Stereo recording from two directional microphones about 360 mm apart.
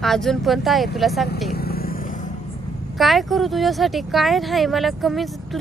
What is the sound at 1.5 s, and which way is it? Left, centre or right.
Vehicle, left.